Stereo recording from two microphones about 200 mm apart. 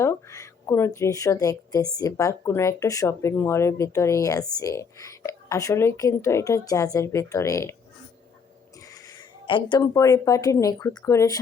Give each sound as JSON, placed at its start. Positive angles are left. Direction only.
{"t": 0.0, "sound": "speech", "side_deg": 15}
{"t": 9.5, "sound": "speech", "side_deg": 25}